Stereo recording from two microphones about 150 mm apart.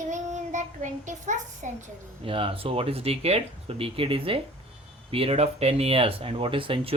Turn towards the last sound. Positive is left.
turn(degrees=-35)  # may be behind; listen again after turning